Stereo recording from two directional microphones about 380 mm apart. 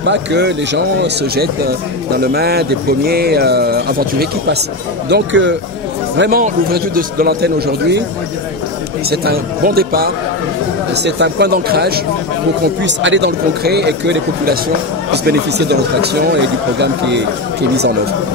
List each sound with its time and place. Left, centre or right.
0.0 s speech: right
9.1 s speech: right